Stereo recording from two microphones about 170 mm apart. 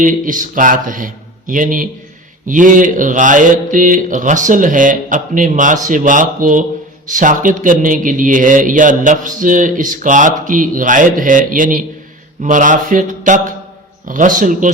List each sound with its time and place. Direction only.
0.0 s a man's voice: 50° right (ahead or behind)